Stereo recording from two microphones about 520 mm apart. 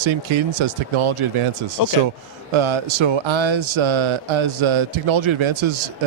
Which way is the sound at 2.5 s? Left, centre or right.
Right.